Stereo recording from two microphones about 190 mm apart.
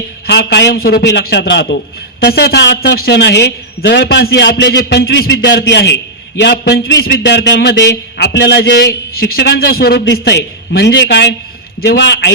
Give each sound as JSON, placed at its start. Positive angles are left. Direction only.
{"t": 0.3, "sound": "a man's voice", "side_deg": 65}